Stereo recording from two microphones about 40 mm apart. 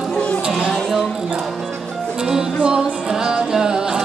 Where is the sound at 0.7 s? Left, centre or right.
Centre.